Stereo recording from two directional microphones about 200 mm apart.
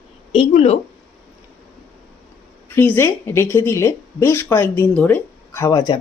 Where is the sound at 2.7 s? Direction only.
10° left (ahead or behind).